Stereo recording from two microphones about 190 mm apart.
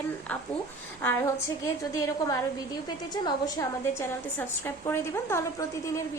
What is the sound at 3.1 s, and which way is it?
A woman's voice, 20° left (ahead or behind).